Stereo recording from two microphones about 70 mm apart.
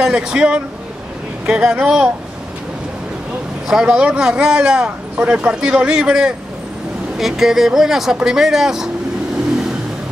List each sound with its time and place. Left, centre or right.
0.0 s speech: centre
3.6 s speech: centre